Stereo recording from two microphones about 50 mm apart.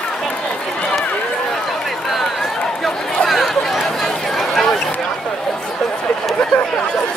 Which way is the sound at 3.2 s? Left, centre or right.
Centre.